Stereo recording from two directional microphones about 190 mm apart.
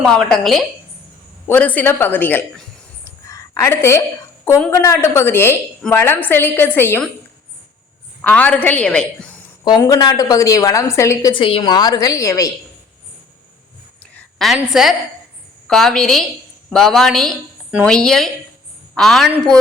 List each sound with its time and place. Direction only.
0.0 s a woman's voice: centre (ahead or behind)
3.0 s a sound: 15° left (ahead or behind)
4.7 s a woman's voice: 15° left (ahead or behind)
8.2 s a woman's voice: 5° left (ahead or behind)
9.6 s a woman's voice: 20° left (ahead or behind)
14.3 s a woman's voice: centre (ahead or behind)